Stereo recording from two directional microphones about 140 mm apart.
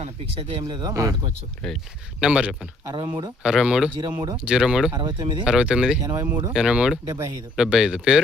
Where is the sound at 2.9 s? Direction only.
30° right (ahead or behind).